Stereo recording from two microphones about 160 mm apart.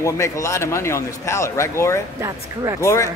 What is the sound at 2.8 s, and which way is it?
Speech, 20° left (ahead or behind).